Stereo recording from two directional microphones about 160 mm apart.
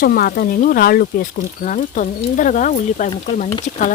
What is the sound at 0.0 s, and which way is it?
Speech, 70° left (ahead or behind).